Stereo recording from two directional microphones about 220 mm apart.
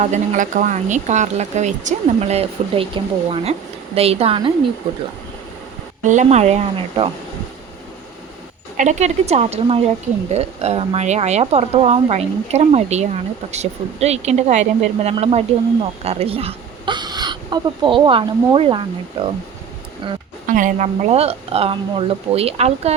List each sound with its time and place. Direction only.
0.0 s speech: 35° right (ahead or behind)
6.0 s speech: 35° right (ahead or behind)
8.7 s speech: 35° right (ahead or behind)
20.5 s speech: 35° right (ahead or behind)